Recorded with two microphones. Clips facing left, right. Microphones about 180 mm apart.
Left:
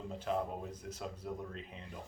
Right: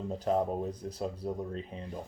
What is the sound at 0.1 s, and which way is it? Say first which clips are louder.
Speech: right 7 dB; 40° right (ahead or behind).